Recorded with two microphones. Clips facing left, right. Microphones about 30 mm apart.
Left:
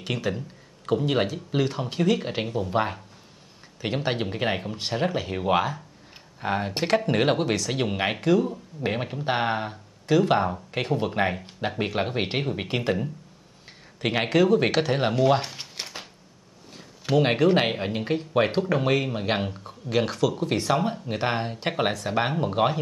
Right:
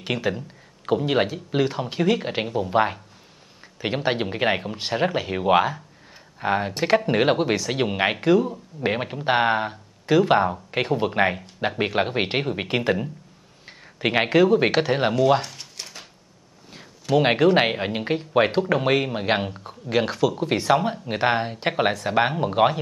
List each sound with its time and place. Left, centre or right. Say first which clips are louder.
0.0 s speech: right 3 dB; centre
15.1 s speech: right 2 dB; centre
15.4 s a sound: left 2 dB; centre
17.2 s speech: right 3 dB; centre